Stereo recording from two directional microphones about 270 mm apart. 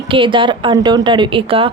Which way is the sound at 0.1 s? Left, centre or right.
Centre.